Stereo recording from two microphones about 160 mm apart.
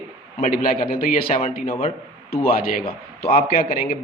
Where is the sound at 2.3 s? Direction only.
70° left (ahead or behind).